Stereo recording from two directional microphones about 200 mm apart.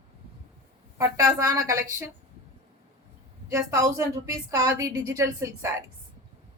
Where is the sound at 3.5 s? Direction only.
15° right (ahead or behind).